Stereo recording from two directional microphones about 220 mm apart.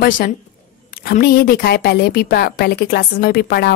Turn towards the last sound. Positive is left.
turn(degrees=45)  # may be behind; listen again after turning